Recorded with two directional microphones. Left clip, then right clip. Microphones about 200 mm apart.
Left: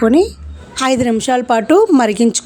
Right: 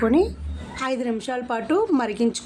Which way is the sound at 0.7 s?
45° left (ahead or behind).